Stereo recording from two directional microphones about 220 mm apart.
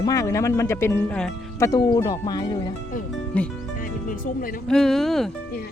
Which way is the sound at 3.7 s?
40° left (ahead or behind).